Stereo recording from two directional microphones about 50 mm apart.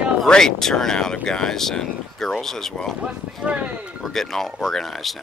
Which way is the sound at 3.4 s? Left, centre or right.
Right.